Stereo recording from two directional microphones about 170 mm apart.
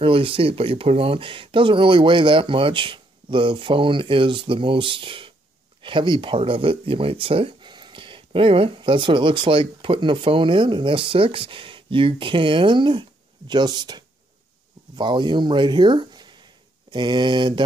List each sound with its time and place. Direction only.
0.0 s speech: 35° right (ahead or behind)